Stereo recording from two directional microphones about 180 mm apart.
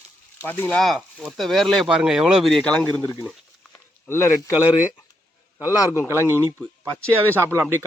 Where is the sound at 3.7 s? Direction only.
15° left (ahead or behind).